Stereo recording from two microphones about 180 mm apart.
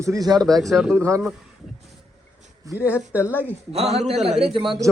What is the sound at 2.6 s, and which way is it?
Speech, 10° right (ahead or behind).